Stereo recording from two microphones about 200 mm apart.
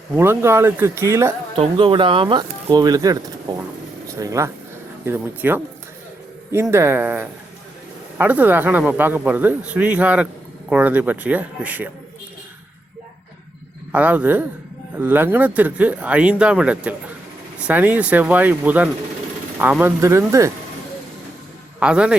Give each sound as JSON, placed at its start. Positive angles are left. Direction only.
{"t": 0.2, "sound": "speech", "side_deg": -10}
{"t": 1.5, "sound": "speech", "side_deg": -25}
{"t": 4.2, "sound": "speech", "side_deg": -15}
{"t": 13.9, "sound": "speech", "side_deg": -10}
{"t": 21.8, "sound": "speech", "side_deg": -5}